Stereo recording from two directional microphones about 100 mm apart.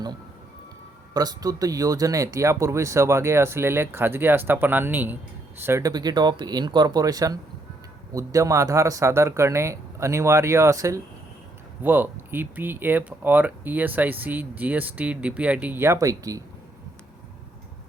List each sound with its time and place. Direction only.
1.1 s speech: 40° right (ahead or behind); by 5.8 s 25° right (ahead or behind)
5.8 s speech: 40° right (ahead or behind)
11.8 s speech: 20° right (ahead or behind); by 16.4 s 35° right (ahead or behind)